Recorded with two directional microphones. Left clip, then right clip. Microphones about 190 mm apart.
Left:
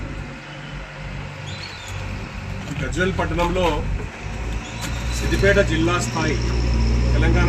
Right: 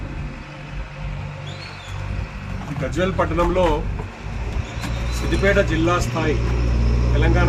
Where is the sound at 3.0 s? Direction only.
5° right (ahead or behind).